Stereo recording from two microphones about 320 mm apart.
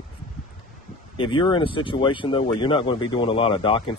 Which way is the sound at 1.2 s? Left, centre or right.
Centre.